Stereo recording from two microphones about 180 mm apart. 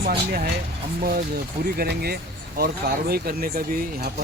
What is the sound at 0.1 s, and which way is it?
Speech, 60° right (ahead or behind).